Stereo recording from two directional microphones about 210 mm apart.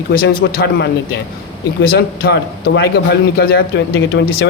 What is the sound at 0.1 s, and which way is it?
A man's voice, 45° left (ahead or behind).